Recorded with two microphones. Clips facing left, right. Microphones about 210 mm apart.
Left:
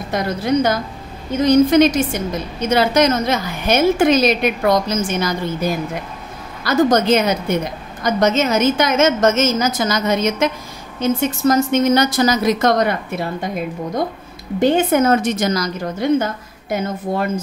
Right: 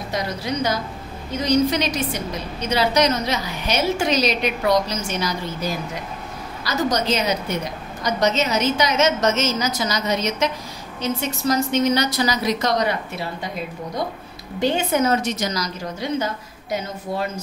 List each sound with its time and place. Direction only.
0.1 s a woman's voice: 55° left (ahead or behind)
14.6 s a woman's voice: 50° left (ahead or behind)